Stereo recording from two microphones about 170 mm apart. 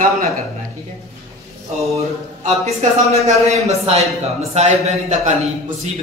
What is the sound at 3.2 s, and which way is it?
Speech, 40° right (ahead or behind).